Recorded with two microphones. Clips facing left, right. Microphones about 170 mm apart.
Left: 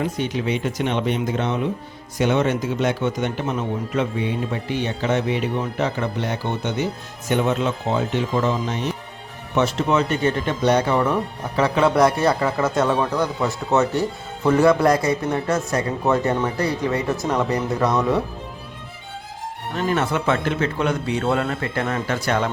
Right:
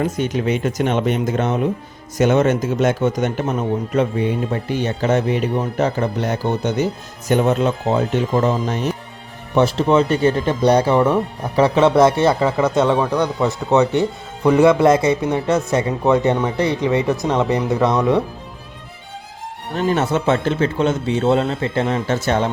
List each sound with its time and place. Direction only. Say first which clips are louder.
0.0 s speech: right 4 dB; 45° right (ahead or behind); by 18.2 s 20° right (ahead or behind)
19.7 s speech: right 4 dB; 30° right (ahead or behind)